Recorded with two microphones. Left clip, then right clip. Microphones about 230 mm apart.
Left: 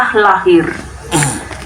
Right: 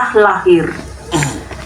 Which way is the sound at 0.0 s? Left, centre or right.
Left.